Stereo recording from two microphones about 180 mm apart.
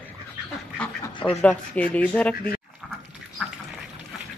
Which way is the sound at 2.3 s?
55° left (ahead or behind).